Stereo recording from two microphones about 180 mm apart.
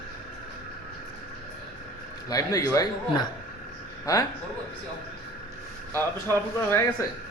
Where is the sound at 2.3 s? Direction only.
20° left (ahead or behind).